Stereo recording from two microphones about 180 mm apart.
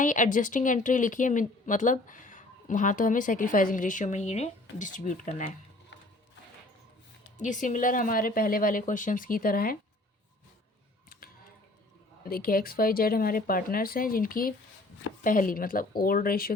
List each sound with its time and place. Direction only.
0.0 s a woman's voice: 45° left (ahead or behind)
7.3 s a woman's voice: 45° left (ahead or behind)
12.2 s a woman's voice: 55° left (ahead or behind)